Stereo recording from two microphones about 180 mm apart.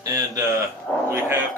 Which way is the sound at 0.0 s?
20° right (ahead or behind).